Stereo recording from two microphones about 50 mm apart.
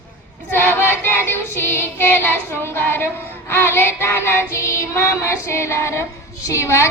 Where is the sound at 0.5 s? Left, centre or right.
Left.